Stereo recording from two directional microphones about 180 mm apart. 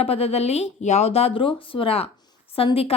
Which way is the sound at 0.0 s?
35° left (ahead or behind).